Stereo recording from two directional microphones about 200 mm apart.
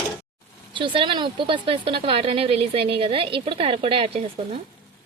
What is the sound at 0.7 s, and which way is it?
Speech, 25° right (ahead or behind).